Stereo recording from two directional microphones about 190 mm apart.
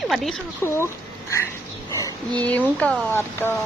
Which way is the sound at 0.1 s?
Centre (ahead or behind).